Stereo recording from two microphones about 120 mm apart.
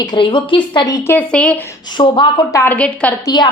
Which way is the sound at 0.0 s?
40° left (ahead or behind).